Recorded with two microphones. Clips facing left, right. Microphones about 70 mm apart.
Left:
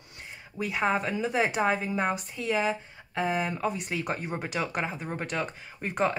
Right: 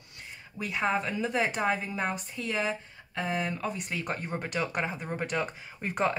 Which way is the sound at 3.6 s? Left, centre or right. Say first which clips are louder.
Left 3 dB; centre.